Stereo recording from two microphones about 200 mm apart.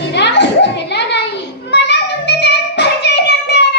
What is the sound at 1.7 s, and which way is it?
Child singing, 60° left (ahead or behind).